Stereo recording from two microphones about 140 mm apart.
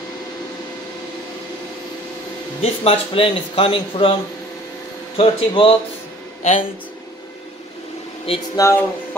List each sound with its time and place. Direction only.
2.6 s speech: 40° left (ahead or behind)
5.1 s speech: 40° left (ahead or behind)
8.5 s speech: 20° left (ahead or behind)